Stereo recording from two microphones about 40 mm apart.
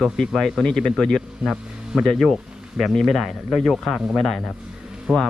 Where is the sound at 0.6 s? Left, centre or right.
Centre.